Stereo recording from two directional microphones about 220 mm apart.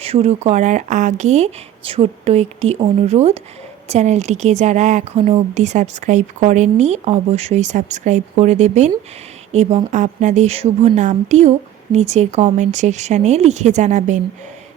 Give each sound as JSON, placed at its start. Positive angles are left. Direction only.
{"t": 0.0, "sound": "speech", "side_deg": -25}